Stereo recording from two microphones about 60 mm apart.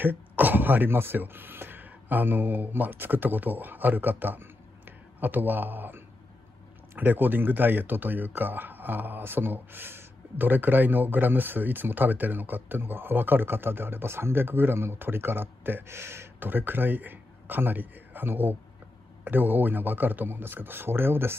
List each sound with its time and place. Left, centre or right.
0.0 s speech: right